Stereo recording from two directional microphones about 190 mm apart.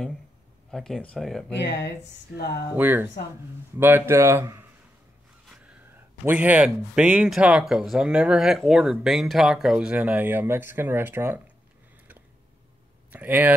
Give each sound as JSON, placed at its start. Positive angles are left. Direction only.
{"t": 0.7, "sound": "speech", "side_deg": 0}
{"t": 1.6, "sound": "speech", "side_deg": 60}
{"t": 2.7, "sound": "speech", "side_deg": -10}
{"t": 6.2, "sound": "speech", "side_deg": -10}
{"t": 13.1, "sound": "speech", "side_deg": -10}